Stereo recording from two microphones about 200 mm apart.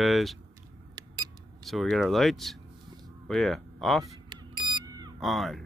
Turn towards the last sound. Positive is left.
turn(degrees=0)  # may be behind; listen again after turning